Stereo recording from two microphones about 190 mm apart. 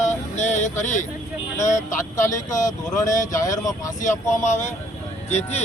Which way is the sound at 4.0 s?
40° left (ahead or behind).